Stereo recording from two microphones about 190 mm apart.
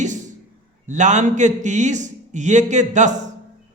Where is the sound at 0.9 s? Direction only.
40° right (ahead or behind).